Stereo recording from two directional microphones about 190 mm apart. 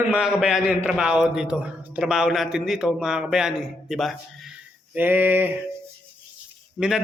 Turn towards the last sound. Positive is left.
turn(degrees=-5)  # may be behind; listen again after turning